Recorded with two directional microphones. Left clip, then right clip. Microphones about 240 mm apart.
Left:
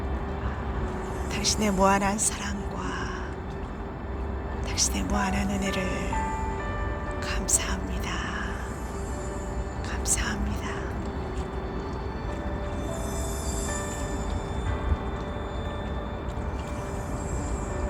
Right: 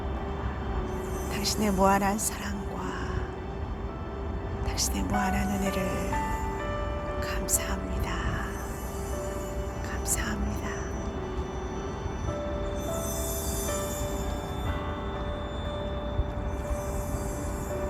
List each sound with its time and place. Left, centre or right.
1.4 s music: centre
4.8 s music: centre
5.8 s speech: right
7.3 s speech: centre